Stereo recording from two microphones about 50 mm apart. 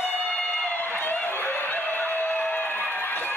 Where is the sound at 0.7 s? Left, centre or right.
Left.